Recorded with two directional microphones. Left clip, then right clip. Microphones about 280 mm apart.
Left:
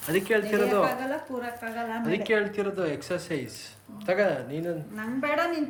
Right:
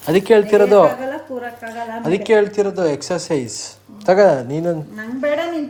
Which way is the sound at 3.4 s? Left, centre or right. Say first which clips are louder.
Right 11 dB; right.